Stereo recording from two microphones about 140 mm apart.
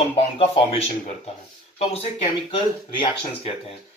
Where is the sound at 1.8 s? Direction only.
50° left (ahead or behind).